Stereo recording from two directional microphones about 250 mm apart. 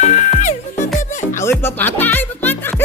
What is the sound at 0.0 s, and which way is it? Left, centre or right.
Music, left.